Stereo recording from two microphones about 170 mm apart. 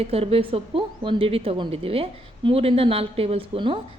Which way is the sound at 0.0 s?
35° right (ahead or behind).